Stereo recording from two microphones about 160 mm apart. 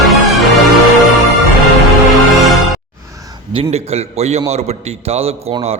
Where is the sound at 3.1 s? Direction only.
20° right (ahead or behind).